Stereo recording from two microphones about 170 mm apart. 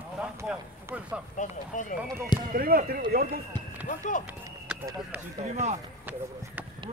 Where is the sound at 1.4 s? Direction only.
45° left (ahead or behind).